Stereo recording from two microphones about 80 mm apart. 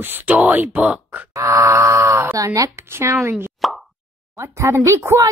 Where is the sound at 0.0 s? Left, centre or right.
Right.